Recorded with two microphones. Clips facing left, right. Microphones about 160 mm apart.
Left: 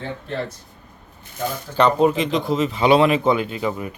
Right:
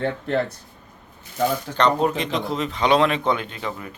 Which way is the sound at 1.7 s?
5° left (ahead or behind).